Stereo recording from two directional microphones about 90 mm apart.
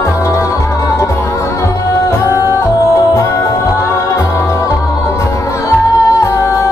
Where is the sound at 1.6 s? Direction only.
30° left (ahead or behind).